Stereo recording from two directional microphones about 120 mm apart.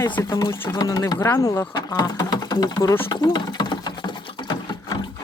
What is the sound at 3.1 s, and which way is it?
Sewing machine, 35° left (ahead or behind).